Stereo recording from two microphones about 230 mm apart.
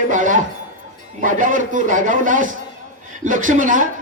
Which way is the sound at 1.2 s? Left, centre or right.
Right.